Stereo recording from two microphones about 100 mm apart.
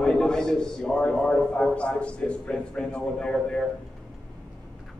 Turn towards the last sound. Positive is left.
turn(degrees=5)  # may be behind; listen again after turning